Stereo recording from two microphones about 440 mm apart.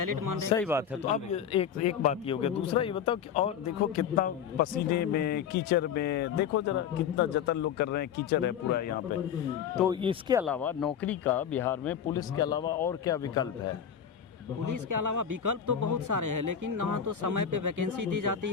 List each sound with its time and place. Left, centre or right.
0.0 s a man's voice: right
1.1 s a man's voice: centre
9.7 s speech: centre
10.4 s a man's voice: centre
14.6 s a man's voice: right